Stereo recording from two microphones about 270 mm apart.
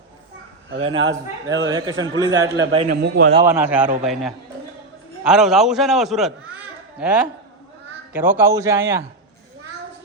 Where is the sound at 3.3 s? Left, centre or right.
Centre.